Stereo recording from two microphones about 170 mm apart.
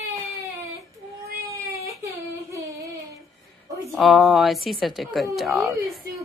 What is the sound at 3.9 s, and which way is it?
Speech, centre (ahead or behind).